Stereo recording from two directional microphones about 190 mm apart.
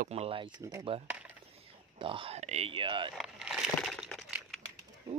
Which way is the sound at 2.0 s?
30° right (ahead or behind).